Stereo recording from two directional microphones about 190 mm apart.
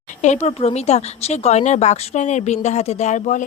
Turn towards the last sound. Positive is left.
turn(degrees=40)  # may be behind; listen again after turning